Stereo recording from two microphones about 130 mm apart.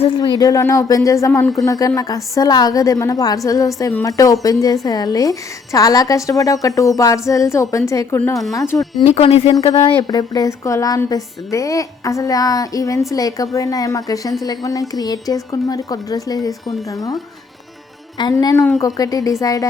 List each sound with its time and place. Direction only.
0.2 s a woman's voice: 30° left (ahead or behind)
9.0 s speech: 50° left (ahead or behind)
9.7 s a woman's voice: 30° left (ahead or behind)
18.2 s a woman's voice: 30° left (ahead or behind)